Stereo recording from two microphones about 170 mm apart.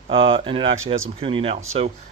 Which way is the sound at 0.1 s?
35° right (ahead or behind).